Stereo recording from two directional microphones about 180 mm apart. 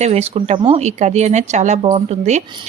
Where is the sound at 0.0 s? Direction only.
35° right (ahead or behind).